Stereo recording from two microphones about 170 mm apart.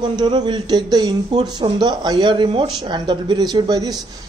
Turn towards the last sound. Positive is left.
turn(degrees=-20)  # may be behind; listen again after turning